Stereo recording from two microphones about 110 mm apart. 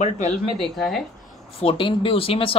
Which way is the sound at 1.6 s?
50° left (ahead or behind).